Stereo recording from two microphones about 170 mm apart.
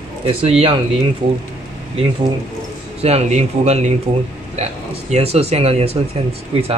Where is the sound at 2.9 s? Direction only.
40° right (ahead or behind).